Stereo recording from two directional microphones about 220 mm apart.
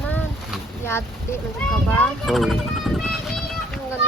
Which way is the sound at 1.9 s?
5° left (ahead or behind).